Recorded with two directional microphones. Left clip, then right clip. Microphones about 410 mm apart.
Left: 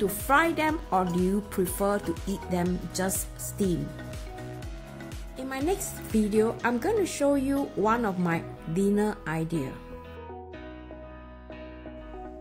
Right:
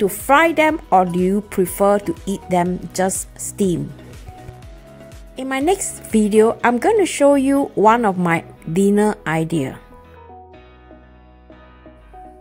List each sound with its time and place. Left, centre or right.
0.0 s speech: centre
5.3 s a woman's voice: centre